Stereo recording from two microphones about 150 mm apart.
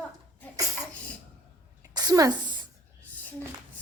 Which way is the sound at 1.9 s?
25° right (ahead or behind).